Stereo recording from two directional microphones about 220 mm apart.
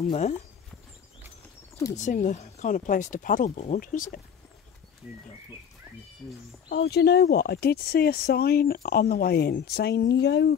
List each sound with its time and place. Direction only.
0.0 s speech: 30° left (ahead or behind)
2.0 s speech: 35° left (ahead or behind)
6.7 s speech: 50° left (ahead or behind)